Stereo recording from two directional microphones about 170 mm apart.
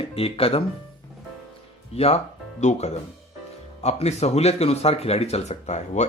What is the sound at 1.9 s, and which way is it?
Speech, 35° left (ahead or behind).